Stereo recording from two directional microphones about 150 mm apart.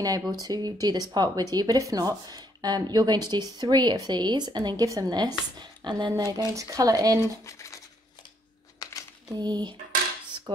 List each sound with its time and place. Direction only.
0.3 s speech: 25° right (ahead or behind)
7.4 s speech: 20° left (ahead or behind)
8.8 s a sound: 25° left (ahead or behind)
9.4 s speech: 30° right (ahead or behind)